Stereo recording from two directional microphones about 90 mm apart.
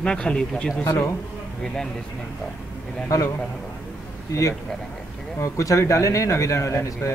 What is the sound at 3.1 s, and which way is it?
Speech, 40° left (ahead or behind).